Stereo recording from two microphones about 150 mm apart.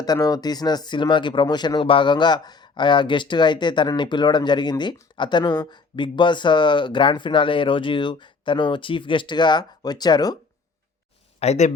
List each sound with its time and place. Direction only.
0.0 s speech: 25° left (ahead or behind)
11.3 s speech: 50° left (ahead or behind)